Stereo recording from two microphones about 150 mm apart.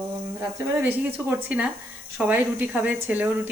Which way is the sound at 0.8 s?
10° right (ahead or behind).